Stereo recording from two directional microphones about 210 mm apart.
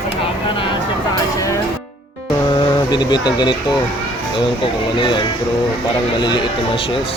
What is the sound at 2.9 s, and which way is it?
Speech, 20° left (ahead or behind).